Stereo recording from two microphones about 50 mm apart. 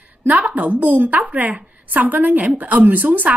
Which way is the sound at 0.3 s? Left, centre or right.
Right.